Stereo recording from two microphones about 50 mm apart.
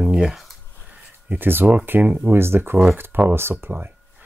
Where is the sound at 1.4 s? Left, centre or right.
Right.